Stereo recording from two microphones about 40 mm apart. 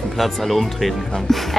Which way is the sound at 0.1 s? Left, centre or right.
Centre.